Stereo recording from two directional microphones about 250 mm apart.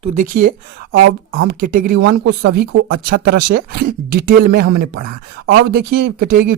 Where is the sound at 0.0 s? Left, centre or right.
Right.